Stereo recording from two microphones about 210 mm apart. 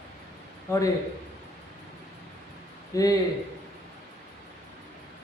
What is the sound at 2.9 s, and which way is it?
Speech, 15° left (ahead or behind).